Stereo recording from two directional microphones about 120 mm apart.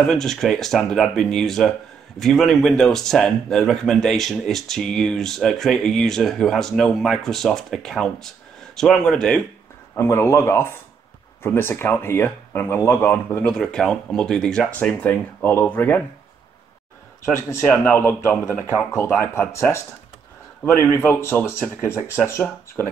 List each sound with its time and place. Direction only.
0.0 s speech: 5° left (ahead or behind)
9.9 s speech: 20° left (ahead or behind)
13.5 s speech: 5° left (ahead or behind)
17.2 s speech: 20° left (ahead or behind)